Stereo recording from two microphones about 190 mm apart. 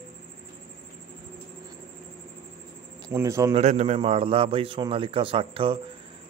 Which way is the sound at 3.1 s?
15° right (ahead or behind).